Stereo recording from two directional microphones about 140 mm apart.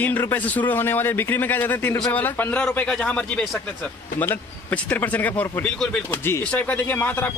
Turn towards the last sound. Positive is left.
turn(degrees=15)  # may be behind; listen again after turning